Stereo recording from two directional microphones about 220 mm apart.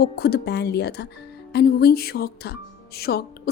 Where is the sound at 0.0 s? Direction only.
45° left (ahead or behind).